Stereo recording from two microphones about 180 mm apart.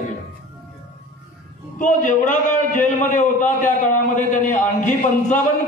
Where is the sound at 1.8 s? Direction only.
45° left (ahead or behind).